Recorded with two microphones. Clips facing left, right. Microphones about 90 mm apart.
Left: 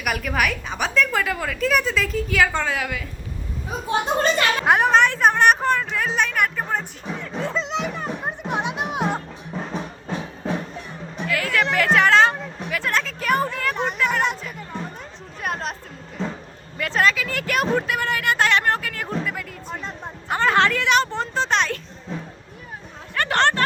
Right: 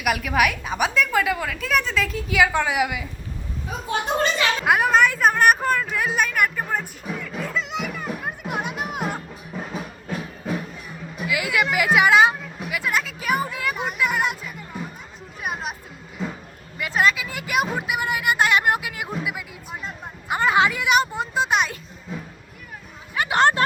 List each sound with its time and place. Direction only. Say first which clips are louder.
0.0 s a woman's voice: right 2 dB; 5° right (ahead or behind)
4.6 s a woman's voice: left 1 dB; 5° right (ahead or behind)
7.3 s music: left 3 dB; 30° left (ahead or behind)
7.7 s music: left 2 dB; 5° right (ahead or behind)
12.5 s speech: left 1 dB; 5° right (ahead or behind)
15.4 s chatter: left 2 dB; 5° right (ahead or behind)
16.2 s a sound: left 2 dB; 5° right (ahead or behind)
23.1 s speech: right 1 dB; 10° right (ahead or behind)